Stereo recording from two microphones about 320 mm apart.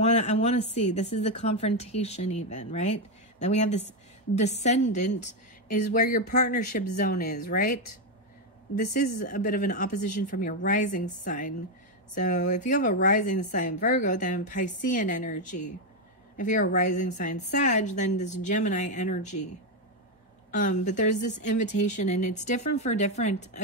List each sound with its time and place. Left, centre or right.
0.0 s a woman's voice: left
8.9 s a woman's voice: left
20.5 s a woman's voice: left